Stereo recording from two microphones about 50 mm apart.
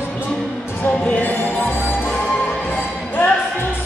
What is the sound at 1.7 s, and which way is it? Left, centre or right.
Music, left.